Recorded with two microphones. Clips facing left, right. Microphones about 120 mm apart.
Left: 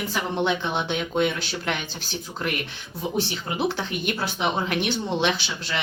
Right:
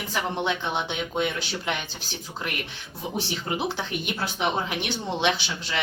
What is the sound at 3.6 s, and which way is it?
Speech, 20° right (ahead or behind).